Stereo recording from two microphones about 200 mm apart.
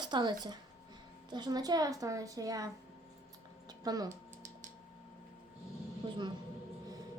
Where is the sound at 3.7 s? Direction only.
20° right (ahead or behind).